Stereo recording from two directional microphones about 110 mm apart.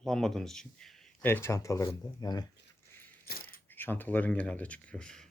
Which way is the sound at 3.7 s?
20° left (ahead or behind).